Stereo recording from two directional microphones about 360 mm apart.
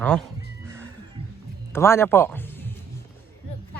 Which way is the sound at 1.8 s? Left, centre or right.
Centre.